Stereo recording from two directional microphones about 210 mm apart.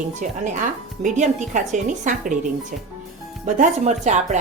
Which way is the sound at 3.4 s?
35° right (ahead or behind).